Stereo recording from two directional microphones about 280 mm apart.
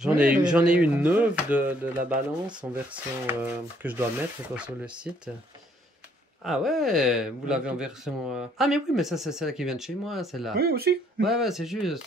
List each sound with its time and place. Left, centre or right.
0.0 s speech: centre
6.4 s speech: centre
10.5 s speech: right
11.2 s speech: centre